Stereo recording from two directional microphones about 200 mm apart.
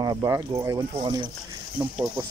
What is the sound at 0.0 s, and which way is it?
Speech, 20° right (ahead or behind).